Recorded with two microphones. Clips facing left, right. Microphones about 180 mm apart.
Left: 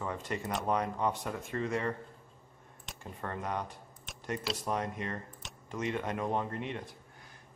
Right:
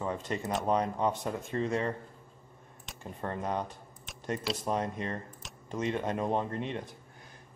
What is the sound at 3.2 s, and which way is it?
Speech, 25° right (ahead or behind).